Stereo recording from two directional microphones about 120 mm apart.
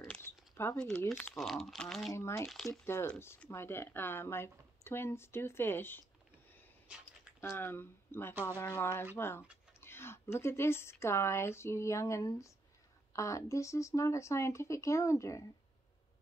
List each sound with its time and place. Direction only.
0.2 s a sound: 20° left (ahead or behind)
0.7 s speech: 5° left (ahead or behind)
1.1 s speech: 20° left (ahead or behind)
1.4 s speech: centre (ahead or behind)
2.1 s speech: 20° left (ahead or behind)
2.4 s speech: centre (ahead or behind)
2.8 s speech: 20° left (ahead or behind)
7.3 s speech: 20° left (ahead or behind)